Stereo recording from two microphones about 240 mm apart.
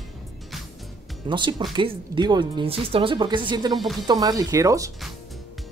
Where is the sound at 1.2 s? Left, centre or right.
Centre.